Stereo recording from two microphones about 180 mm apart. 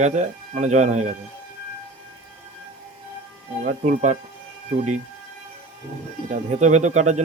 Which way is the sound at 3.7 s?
45° right (ahead or behind).